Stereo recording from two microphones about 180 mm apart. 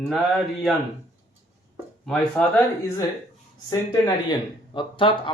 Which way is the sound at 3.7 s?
20° left (ahead or behind).